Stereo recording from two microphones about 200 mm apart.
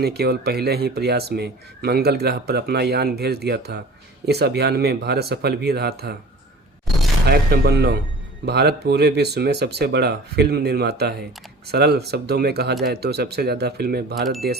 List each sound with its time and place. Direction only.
0.0 s speech: 50° right (ahead or behind)
7.3 s speech: 55° right (ahead or behind)